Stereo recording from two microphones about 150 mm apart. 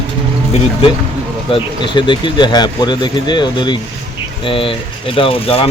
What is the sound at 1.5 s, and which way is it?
Speech, 30° left (ahead or behind).